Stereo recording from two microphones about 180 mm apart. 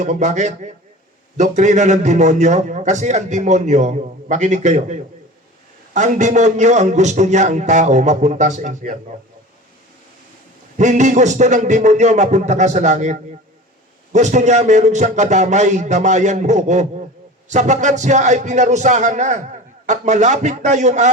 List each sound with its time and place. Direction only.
0.0 s a man's voice: 40° right (ahead or behind)
10.8 s a man's voice: 40° right (ahead or behind)